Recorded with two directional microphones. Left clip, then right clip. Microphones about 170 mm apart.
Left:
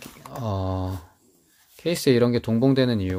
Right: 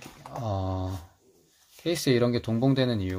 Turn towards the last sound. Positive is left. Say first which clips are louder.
# left 5 dB
turn(degrees=35)  # may be behind; listen again after turning